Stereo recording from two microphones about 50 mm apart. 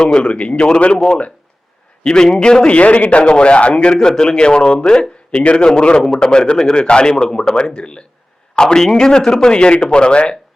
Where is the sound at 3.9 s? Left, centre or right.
Centre.